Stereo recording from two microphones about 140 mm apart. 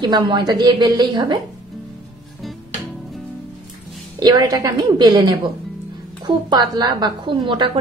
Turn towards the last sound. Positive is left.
turn(degrees=-35)  # may be behind; listen again after turning